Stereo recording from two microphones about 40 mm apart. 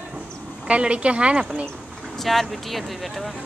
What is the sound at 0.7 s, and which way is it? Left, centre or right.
Speech, right.